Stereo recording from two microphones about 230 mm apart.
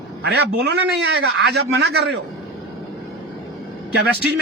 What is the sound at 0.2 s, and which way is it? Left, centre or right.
A man's voice, right.